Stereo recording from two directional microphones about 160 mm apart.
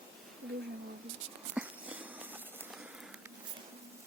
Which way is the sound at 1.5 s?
10° right (ahead or behind).